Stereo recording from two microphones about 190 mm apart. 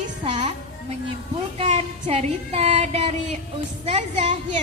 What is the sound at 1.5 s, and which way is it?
Child singing, 35° right (ahead or behind).